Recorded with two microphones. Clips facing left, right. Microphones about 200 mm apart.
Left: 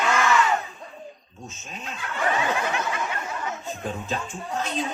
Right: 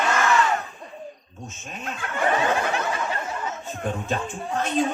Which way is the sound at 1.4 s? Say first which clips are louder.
Right 3 dB; 50° right (ahead or behind).